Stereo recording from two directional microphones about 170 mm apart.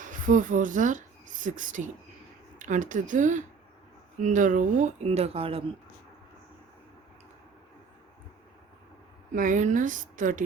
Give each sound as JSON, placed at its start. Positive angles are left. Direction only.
{"t": 0.0, "sound": "speech", "side_deg": -50}
{"t": 9.3, "sound": "speech", "side_deg": -50}